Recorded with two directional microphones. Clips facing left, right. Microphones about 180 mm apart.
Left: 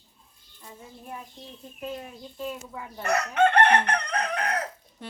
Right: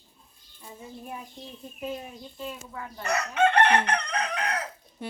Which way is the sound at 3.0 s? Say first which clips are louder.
Left 2 dB; 55° left (ahead or behind).